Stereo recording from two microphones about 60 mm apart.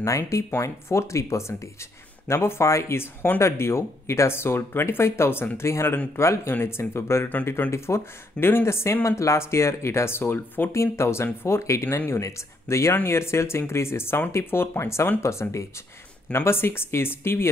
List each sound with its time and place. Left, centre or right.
0.0 s speech: left
9.0 s speech: left
10.7 s speech: left